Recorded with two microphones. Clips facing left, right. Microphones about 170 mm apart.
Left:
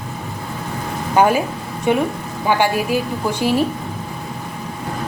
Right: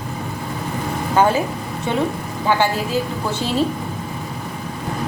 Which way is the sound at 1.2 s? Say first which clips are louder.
Left 2 dB; 15° left (ahead or behind).